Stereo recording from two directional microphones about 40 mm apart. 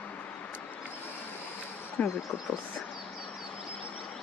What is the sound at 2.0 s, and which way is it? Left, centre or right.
Speech, left.